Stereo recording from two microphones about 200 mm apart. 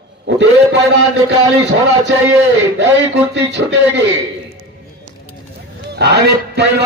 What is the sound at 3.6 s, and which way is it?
Speech, 70° right (ahead or behind).